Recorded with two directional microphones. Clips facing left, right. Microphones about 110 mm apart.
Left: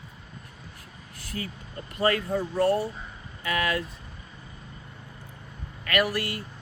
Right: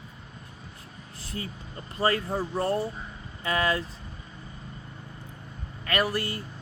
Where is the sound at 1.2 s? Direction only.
25° right (ahead or behind).